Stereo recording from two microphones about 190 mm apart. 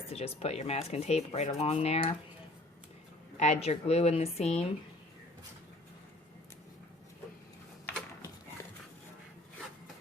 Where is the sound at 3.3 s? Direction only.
35° left (ahead or behind).